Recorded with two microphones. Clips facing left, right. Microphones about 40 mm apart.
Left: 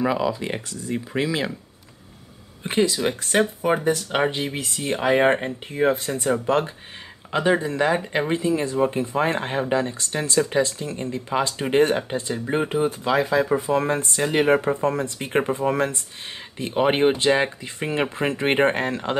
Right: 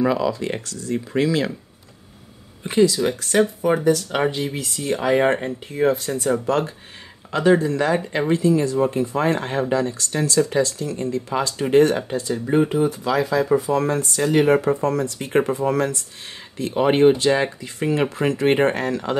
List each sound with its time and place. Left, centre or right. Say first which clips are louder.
0.0 s speech: right 2 dB; centre
2.6 s speech: right 4 dB; left